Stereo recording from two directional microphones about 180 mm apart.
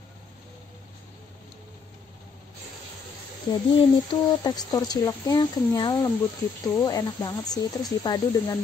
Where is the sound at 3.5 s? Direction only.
25° left (ahead or behind).